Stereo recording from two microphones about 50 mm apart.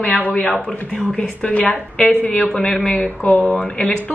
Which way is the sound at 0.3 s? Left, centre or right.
Left.